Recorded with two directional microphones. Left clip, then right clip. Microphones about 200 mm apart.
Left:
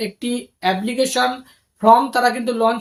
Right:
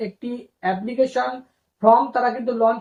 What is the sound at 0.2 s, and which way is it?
Speech, 30° left (ahead or behind).